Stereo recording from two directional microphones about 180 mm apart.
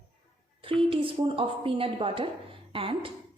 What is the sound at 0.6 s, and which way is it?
A woman's voice, 30° right (ahead or behind).